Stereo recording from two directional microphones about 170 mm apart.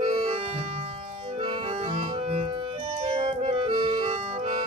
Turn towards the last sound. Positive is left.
turn(degrees=-40)  # may be behind; listen again after turning